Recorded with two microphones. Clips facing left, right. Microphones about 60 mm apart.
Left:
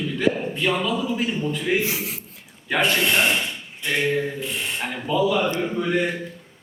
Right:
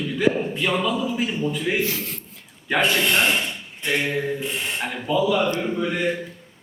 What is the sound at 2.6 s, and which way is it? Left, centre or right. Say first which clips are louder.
Speech: right 1 dB; centre.